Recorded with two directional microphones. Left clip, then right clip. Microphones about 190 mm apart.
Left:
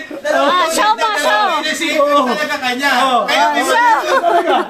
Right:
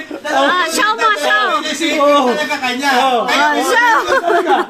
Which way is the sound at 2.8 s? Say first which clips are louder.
Even; 15° left (ahead or behind).